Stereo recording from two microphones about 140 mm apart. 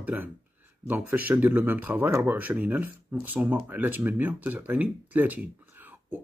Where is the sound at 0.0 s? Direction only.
10° right (ahead or behind).